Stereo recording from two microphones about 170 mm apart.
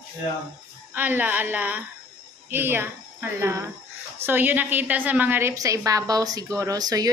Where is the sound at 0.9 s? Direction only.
10° right (ahead or behind).